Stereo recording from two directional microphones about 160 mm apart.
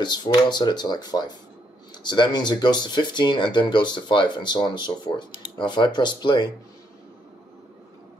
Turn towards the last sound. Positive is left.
turn(degrees=30)  # may be behind; listen again after turning